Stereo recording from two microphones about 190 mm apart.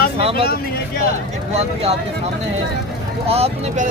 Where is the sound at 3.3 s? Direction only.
35° right (ahead or behind).